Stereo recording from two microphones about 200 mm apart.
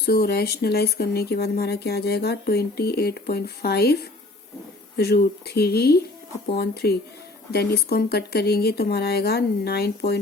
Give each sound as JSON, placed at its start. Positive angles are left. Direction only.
{"t": 0.0, "sound": "speech", "side_deg": 50}